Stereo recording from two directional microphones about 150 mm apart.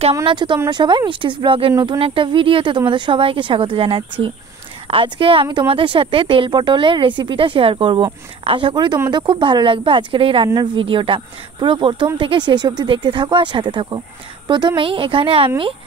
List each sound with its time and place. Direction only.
0.1 s speech: 30° right (ahead or behind)
2.0 s speech: 35° right (ahead or behind)